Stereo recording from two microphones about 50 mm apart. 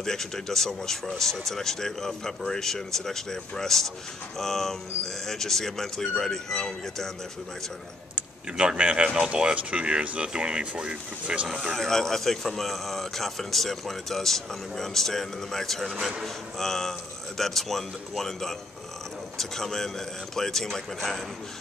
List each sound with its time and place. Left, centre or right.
0.0 s speech: centre
8.5 s speech: right
11.7 s speech: centre